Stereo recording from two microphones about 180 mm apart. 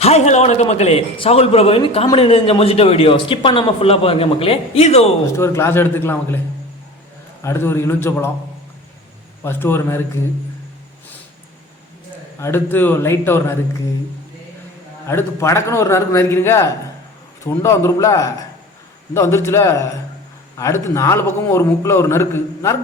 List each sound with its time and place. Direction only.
0.0 s a man's voice: 35° left (ahead or behind)
5.4 s a man's voice: 15° left (ahead or behind)
7.4 s a man's voice: 15° left (ahead or behind)
9.4 s a man's voice: 10° left (ahead or behind)
12.4 s a man's voice: 10° left (ahead or behind)
15.0 s a man's voice: 15° left (ahead or behind)